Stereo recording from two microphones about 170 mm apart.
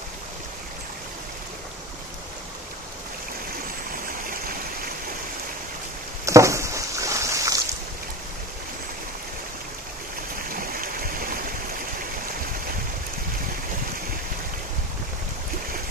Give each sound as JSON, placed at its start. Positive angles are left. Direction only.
{"t": 3.9, "sound": "stream", "side_deg": -55}
{"t": 6.2, "sound": "boat", "side_deg": -15}
{"t": 10.5, "sound": "a sound", "side_deg": -55}